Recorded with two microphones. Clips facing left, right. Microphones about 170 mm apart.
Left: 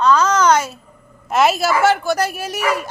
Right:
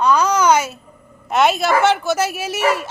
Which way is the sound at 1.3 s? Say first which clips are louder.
Even; centre (ahead or behind).